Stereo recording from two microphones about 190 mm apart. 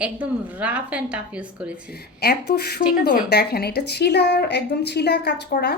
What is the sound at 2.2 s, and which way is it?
Speech, 55° left (ahead or behind).